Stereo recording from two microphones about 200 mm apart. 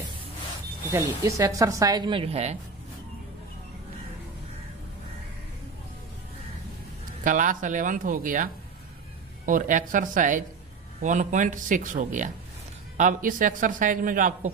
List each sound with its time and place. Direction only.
0.9 s speech: 15° right (ahead or behind)
7.2 s a man's voice: 40° right (ahead or behind)
9.5 s a man's voice: 40° right (ahead or behind)